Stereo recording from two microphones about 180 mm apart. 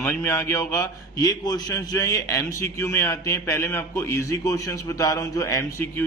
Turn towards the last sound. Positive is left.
turn(degrees=15)  # may be behind; listen again after turning